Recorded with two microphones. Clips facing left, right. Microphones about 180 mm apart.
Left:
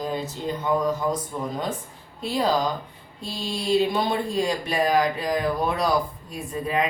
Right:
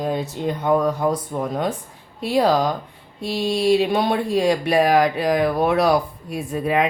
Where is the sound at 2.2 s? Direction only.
70° right (ahead or behind).